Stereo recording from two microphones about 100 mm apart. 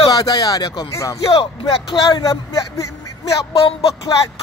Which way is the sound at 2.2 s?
35° left (ahead or behind).